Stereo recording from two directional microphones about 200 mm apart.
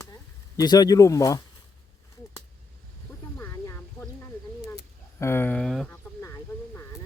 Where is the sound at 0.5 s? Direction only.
20° left (ahead or behind).